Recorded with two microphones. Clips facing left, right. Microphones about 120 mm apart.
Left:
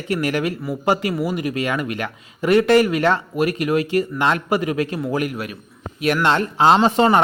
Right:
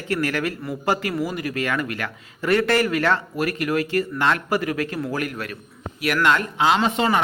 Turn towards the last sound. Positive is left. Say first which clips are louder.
# left 5 dB
turn(degrees=35)  # may be behind; listen again after turning